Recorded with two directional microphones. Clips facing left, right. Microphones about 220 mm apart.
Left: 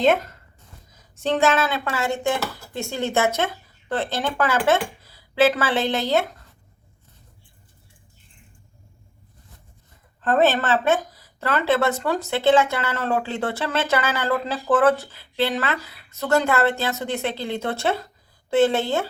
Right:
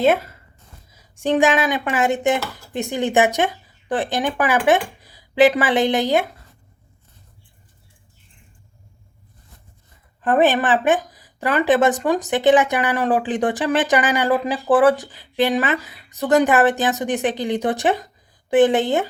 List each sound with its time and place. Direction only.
0.0 s speech: 10° right (ahead or behind)
10.2 s speech: 15° right (ahead or behind)